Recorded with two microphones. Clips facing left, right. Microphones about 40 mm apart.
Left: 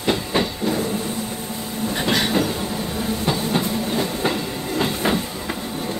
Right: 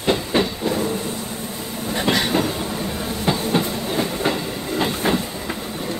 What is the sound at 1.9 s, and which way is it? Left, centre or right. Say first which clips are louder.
Train: right 1 dB; centre.